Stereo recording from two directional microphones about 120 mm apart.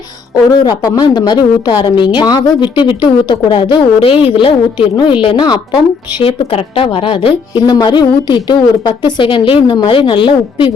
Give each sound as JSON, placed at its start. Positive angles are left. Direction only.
{"t": 0.6, "sound": "a woman's voice", "side_deg": 35}